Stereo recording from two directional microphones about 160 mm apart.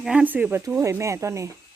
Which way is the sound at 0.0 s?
5° right (ahead or behind).